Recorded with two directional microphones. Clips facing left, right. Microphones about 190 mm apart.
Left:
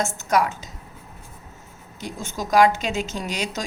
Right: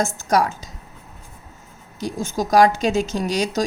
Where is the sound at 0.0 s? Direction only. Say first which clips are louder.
Right 2 dB; 35° right (ahead or behind).